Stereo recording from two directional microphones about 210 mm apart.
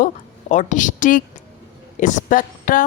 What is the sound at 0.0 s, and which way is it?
A woman's voice, 35° left (ahead or behind).